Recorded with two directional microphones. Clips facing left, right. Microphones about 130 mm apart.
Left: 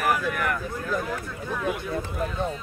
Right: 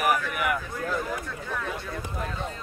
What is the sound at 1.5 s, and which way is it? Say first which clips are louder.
Speech: left 6 dB; 15° left (ahead or behind).